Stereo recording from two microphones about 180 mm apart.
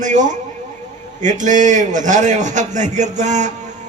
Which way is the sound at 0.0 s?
45° right (ahead or behind).